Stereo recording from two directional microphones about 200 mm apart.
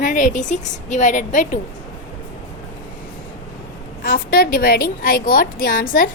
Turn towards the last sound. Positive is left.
turn(degrees=45)  # may be behind; listen again after turning